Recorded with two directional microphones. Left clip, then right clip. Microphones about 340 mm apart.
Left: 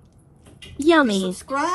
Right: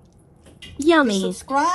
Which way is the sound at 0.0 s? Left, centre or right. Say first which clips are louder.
Right 2 dB; centre.